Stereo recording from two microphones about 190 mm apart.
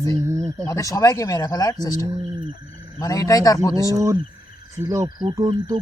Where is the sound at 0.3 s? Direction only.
15° right (ahead or behind).